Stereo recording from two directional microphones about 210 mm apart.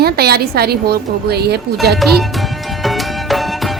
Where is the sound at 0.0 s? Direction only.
50° right (ahead or behind).